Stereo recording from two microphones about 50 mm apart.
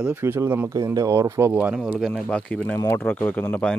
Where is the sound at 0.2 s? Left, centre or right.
Right.